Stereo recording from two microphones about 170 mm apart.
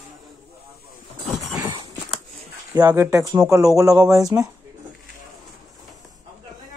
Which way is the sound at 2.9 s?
20° right (ahead or behind).